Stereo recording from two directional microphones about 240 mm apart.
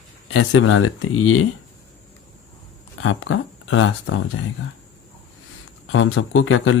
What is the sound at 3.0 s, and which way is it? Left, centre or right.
Speech, left.